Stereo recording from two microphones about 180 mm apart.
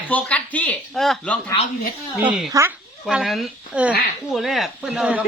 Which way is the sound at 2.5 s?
20° right (ahead or behind).